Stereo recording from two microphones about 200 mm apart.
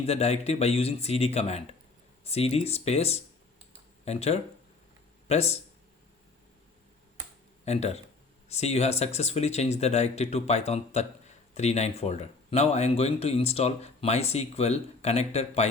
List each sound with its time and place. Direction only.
0.0 s speech: 30° left (ahead or behind)
7.6 s speech: 30° left (ahead or behind)